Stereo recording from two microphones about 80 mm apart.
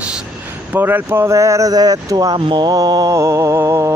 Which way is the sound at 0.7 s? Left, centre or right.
Right.